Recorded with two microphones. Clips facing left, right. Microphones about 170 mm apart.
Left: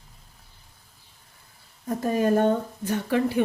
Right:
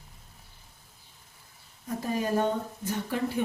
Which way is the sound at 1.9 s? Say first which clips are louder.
Left 6 dB; 50° left (ahead or behind).